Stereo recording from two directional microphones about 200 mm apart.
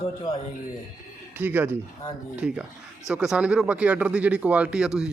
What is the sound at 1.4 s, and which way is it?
Speech, 10° right (ahead or behind).